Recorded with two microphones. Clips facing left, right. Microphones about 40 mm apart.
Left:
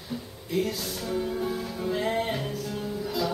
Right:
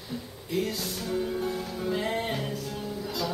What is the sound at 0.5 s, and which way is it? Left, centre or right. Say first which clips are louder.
Music: left 1 dB; centre.